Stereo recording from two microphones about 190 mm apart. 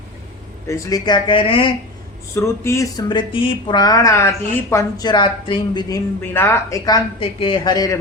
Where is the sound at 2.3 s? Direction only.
15° left (ahead or behind).